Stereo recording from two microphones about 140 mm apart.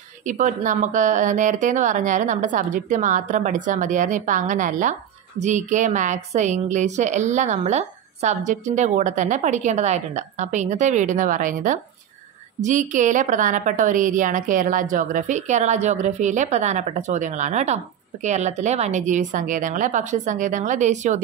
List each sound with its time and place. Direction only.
0.2 s a woman's voice: 65° right (ahead or behind)